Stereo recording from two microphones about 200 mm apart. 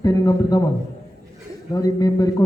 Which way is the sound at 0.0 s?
15° left (ahead or behind).